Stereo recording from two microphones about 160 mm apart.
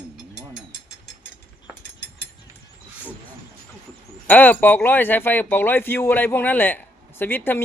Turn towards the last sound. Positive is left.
turn(degrees=15)  # may be behind; listen again after turning